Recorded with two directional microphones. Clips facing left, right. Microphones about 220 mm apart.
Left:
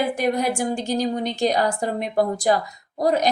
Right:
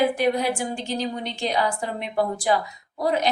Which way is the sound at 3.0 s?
40° left (ahead or behind).